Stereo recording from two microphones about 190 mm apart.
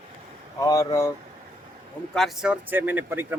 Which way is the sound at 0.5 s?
15° left (ahead or behind).